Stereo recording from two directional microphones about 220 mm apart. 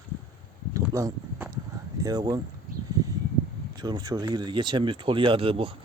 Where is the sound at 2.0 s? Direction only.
15° right (ahead or behind).